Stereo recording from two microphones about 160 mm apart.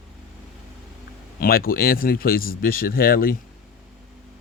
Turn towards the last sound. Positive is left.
turn(degrees=65)  # may be behind; listen again after turning